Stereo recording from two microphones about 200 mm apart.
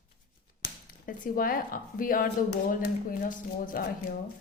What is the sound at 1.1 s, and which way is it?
Speech, 45° left (ahead or behind).